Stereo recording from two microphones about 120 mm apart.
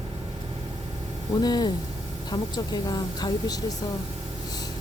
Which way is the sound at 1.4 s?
35° left (ahead or behind).